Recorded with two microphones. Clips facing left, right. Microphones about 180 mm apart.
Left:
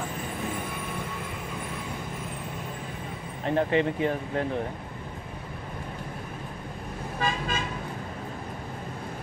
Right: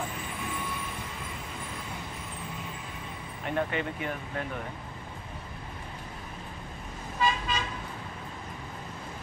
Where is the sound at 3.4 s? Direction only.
30° left (ahead or behind).